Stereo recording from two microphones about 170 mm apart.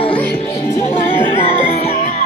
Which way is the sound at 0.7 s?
45° left (ahead or behind).